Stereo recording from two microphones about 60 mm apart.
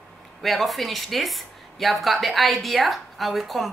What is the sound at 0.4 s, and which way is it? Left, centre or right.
Speech, centre.